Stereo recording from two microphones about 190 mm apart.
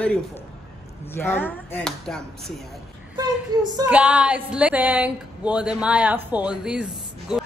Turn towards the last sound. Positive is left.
turn(degrees=-5)  # may be behind; listen again after turning